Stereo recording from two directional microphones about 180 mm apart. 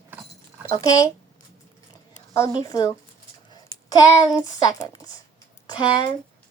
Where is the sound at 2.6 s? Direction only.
20° left (ahead or behind).